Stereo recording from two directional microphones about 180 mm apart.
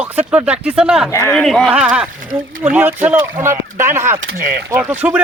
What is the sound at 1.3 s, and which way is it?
Speech, 5° left (ahead or behind).